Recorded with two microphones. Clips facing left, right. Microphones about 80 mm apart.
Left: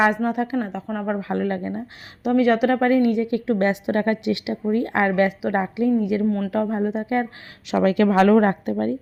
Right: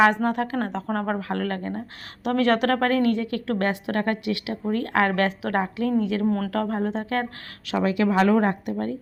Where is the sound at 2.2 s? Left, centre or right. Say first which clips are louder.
Left 3 dB; centre.